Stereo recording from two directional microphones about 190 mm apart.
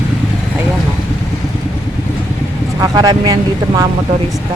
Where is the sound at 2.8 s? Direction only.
20° right (ahead or behind).